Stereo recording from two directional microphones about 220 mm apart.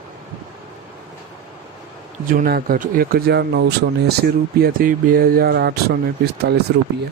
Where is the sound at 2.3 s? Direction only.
40° right (ahead or behind).